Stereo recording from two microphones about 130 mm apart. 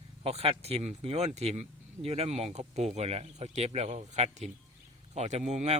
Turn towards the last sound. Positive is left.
turn(degrees=-60)  # may be behind; listen again after turning